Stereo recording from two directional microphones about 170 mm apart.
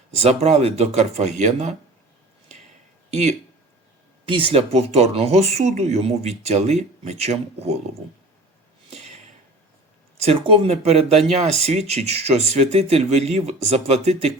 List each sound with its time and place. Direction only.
0.2 s speech: 40° right (ahead or behind)
3.1 s speech: 40° right (ahead or behind)
8.9 s a sound: 40° right (ahead or behind)
10.2 s speech: 35° right (ahead or behind)